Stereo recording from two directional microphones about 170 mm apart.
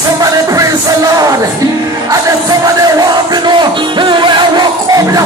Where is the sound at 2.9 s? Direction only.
25° right (ahead or behind).